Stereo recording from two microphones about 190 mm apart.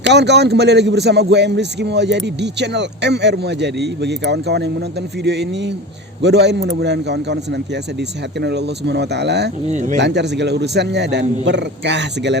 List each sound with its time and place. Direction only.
0.0 s speech: 65° right (ahead or behind)
9.6 s speech: 40° right (ahead or behind)
10.0 s speech: 65° right (ahead or behind)